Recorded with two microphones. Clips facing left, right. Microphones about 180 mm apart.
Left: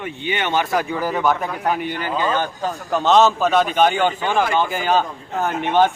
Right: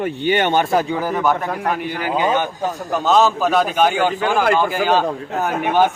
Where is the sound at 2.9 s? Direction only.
Centre (ahead or behind).